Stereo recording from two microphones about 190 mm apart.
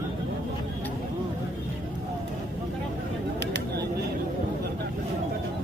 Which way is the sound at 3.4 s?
60° right (ahead or behind).